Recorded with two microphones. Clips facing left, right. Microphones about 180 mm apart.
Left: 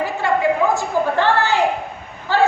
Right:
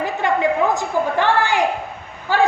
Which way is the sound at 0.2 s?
20° right (ahead or behind).